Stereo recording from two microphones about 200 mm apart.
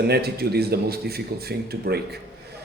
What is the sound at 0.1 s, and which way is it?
A man's voice, 50° right (ahead or behind).